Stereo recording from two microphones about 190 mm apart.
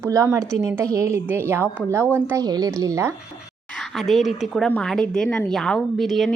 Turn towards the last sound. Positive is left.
turn(degrees=0)  # may be behind; listen again after turning